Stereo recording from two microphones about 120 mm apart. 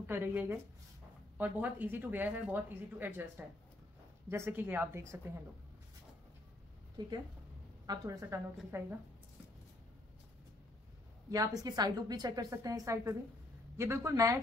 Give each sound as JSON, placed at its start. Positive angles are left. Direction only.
{"t": 0.0, "sound": "a woman's voice", "side_deg": -15}
{"t": 7.0, "sound": "a woman's voice", "side_deg": -35}
{"t": 11.2, "sound": "a woman's voice", "side_deg": -30}